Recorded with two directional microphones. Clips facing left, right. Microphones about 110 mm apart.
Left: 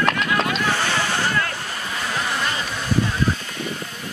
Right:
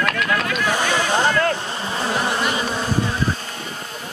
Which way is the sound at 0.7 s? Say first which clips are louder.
Right 2 dB; 15° right (ahead or behind).